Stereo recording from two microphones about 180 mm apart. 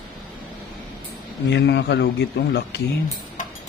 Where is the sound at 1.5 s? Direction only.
70° left (ahead or behind).